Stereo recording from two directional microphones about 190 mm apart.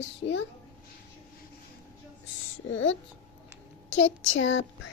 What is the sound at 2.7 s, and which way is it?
Speech, 90° left.